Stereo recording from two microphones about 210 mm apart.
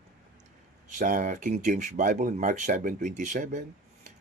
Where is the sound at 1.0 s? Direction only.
40° right (ahead or behind).